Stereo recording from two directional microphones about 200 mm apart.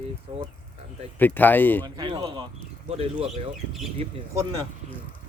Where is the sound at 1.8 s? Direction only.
25° right (ahead or behind).